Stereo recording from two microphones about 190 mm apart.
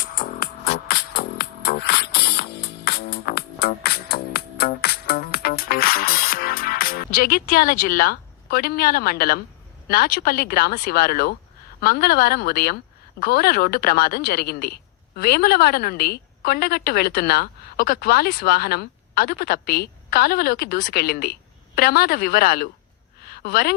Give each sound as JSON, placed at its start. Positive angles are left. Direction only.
{"t": 0.0, "sound": "music", "side_deg": 45}
{"t": 9.9, "sound": "speech", "side_deg": 50}
{"t": 23.2, "sound": "a sound", "side_deg": 55}